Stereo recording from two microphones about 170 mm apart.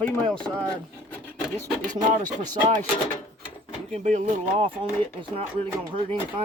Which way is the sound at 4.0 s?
45° right (ahead or behind).